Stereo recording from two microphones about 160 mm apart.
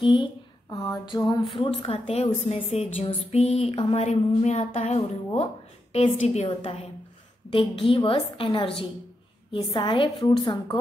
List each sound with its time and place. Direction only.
0.0 s a sound: 30° left (ahead or behind)
0.7 s a woman's voice: 20° left (ahead or behind)
1.6 s a woman's voice: 35° left (ahead or behind)